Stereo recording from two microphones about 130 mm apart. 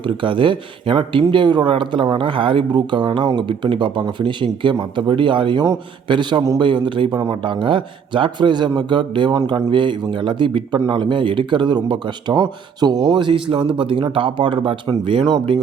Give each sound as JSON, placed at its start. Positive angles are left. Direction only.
{"t": 0.0, "sound": "speech", "side_deg": -40}